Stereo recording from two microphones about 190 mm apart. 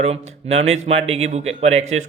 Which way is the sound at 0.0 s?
35° right (ahead or behind).